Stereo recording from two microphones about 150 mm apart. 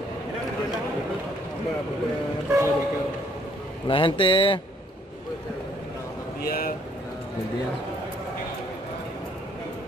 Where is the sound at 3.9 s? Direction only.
35° left (ahead or behind).